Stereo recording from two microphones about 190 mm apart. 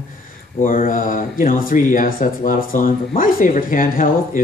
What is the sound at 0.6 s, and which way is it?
A man's voice, 45° left (ahead or behind).